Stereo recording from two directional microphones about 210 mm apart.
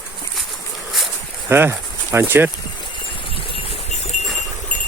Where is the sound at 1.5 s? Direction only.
10° right (ahead or behind).